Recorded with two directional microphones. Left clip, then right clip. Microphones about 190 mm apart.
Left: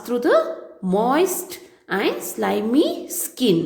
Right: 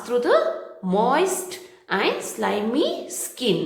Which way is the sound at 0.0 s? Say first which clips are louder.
Left 1 dB; 30° left (ahead or behind).